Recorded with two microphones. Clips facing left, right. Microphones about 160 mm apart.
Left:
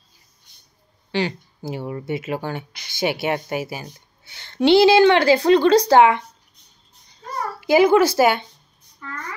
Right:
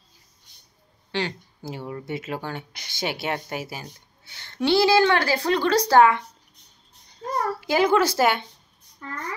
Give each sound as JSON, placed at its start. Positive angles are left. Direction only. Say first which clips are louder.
{"t": 1.1, "sound": "speech", "louder": "left 5 dB", "side_deg": 10}
{"t": 4.3, "sound": "a woman's voice", "louder": "left 7 dB", "side_deg": 20}
{"t": 7.6, "sound": "speech", "louder": "left 6 dB", "side_deg": 10}